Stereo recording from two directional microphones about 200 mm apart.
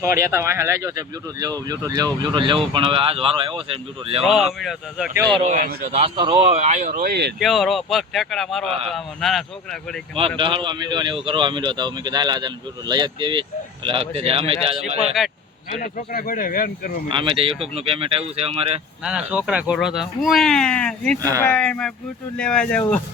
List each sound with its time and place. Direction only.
0.2 s speech: 15° right (ahead or behind); by 4.2 s 30° right (ahead or behind)
4.2 s speech: centre (ahead or behind)
5.3 s speech: 35° right (ahead or behind)
7.0 s speech: 55° right (ahead or behind)
7.3 s speech: centre (ahead or behind)
10.2 s speech: 25° right (ahead or behind)
15.2 s speech: centre (ahead or behind)
15.7 s speech: 40° left (ahead or behind)
17.1 s speech: 25° right (ahead or behind)
19.0 s speech: 5° right (ahead or behind)
21.2 s speech: 15° right (ahead or behind)
21.4 s speech: 5° left (ahead or behind)